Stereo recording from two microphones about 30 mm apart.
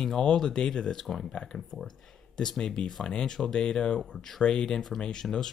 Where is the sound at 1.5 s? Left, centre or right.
Centre.